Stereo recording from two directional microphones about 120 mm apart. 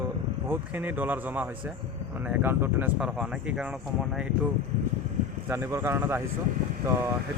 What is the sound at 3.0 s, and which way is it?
A man's voice, 5° right (ahead or behind).